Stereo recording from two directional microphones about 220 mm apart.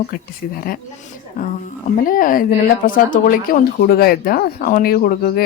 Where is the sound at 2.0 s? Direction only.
40° left (ahead or behind).